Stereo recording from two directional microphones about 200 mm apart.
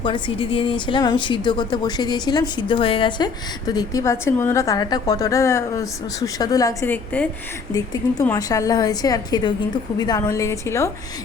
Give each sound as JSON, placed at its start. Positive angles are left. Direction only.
{"t": 0.0, "sound": "a woman's voice", "side_deg": 25}